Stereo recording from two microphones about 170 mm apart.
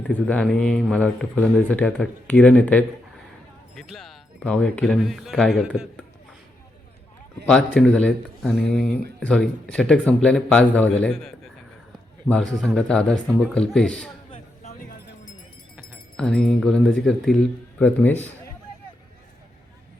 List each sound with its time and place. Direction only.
0.1 s speech: 5° left (ahead or behind)
7.4 s a man's voice: 5° left (ahead or behind)
12.5 s speech: 5° left (ahead or behind)
14.3 s a sound: 40° left (ahead or behind)
15.7 s speech: 5° left (ahead or behind)